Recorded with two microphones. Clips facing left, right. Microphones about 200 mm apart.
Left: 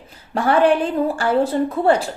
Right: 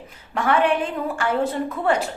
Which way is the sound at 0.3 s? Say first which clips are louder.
Left 4 dB; 35° left (ahead or behind).